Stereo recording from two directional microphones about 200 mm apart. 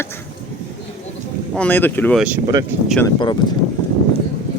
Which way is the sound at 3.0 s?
20° left (ahead or behind).